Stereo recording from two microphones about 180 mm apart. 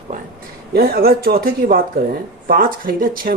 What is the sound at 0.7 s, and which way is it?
Speech, 60° right (ahead or behind).